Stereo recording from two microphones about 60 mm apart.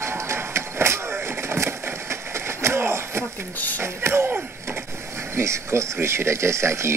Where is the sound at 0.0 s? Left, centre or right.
Right.